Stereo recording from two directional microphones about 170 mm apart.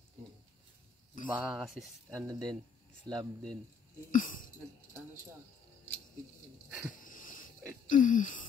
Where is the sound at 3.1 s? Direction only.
25° right (ahead or behind).